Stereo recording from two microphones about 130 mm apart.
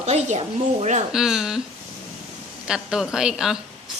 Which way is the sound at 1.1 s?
5° right (ahead or behind).